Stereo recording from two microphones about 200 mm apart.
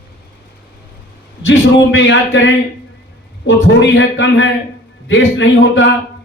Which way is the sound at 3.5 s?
65° left (ahead or behind).